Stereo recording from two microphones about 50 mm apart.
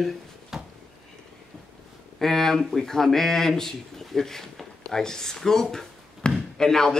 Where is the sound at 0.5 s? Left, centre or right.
Centre.